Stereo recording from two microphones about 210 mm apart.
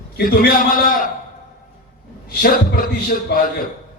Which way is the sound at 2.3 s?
45° left (ahead or behind).